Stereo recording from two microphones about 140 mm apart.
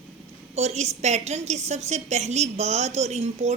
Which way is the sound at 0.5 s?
50° right (ahead or behind).